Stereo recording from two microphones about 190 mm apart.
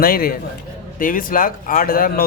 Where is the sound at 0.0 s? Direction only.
50° left (ahead or behind).